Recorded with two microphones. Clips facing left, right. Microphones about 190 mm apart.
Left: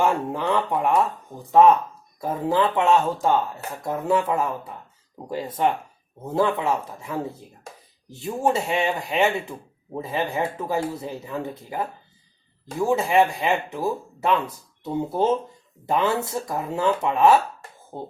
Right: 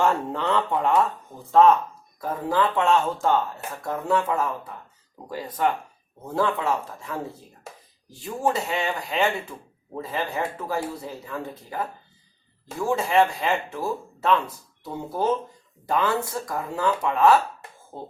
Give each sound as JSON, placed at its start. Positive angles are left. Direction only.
{"t": 0.0, "sound": "speech", "side_deg": 10}
{"t": 5.1, "sound": "speech", "side_deg": 20}